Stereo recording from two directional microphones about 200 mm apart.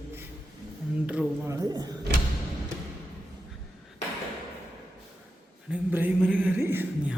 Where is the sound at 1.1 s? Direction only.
10° right (ahead or behind).